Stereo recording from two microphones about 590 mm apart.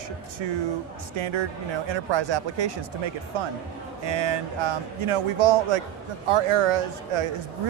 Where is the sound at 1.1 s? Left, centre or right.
Right.